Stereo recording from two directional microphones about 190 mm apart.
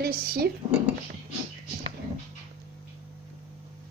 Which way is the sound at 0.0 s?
50° right (ahead or behind).